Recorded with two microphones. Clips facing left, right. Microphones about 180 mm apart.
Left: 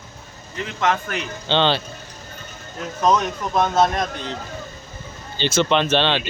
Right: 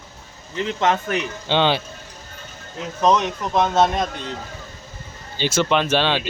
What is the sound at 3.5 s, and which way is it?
Speech, centre (ahead or behind).